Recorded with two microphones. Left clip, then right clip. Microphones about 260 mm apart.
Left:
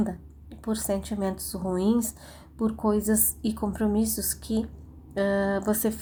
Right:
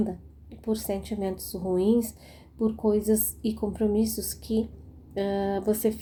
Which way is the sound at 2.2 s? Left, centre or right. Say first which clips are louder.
Right 1 dB; left.